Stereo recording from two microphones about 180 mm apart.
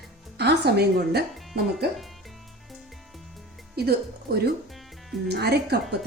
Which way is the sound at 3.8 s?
60° right (ahead or behind).